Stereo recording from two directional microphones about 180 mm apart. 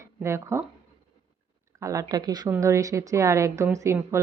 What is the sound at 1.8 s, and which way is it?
A woman's voice, 20° right (ahead or behind).